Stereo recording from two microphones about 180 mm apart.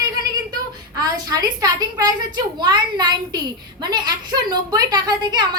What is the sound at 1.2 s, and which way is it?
A woman's voice, 20° right (ahead or behind).